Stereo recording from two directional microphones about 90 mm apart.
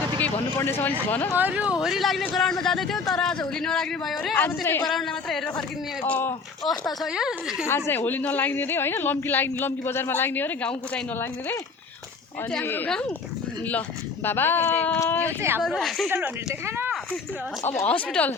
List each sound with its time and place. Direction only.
0.2 s speech: 20° left (ahead or behind)
1.4 s a woman's voice: 15° right (ahead or behind)
1.8 s a man's voice: centre (ahead or behind)
4.4 s a woman's voice: 25° left (ahead or behind)
4.9 s a man's voice: centre (ahead or behind)
6.1 s a woman's voice: 25° left (ahead or behind)
7.0 s a woman's voice: 5° right (ahead or behind)
7.7 s a woman's voice: 25° left (ahead or behind)
12.6 s a woman's voice: 20° left (ahead or behind)
14.3 s a woman's voice: 25° left (ahead or behind)
15.4 s speech: 25° right (ahead or behind)
15.6 s a man's voice: centre (ahead or behind)
16.0 s speech: 30° right (ahead or behind)
17.7 s speech: 20° left (ahead or behind)